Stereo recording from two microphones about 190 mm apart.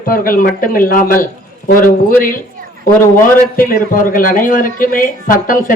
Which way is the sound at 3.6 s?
45° left (ahead or behind).